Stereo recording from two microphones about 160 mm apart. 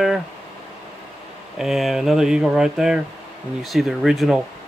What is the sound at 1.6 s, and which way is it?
Speech, centre (ahead or behind).